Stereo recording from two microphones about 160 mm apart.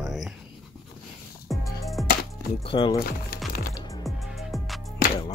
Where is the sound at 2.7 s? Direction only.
30° left (ahead or behind).